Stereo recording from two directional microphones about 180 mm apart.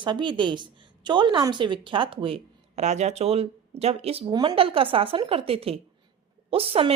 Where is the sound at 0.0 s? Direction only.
25° right (ahead or behind).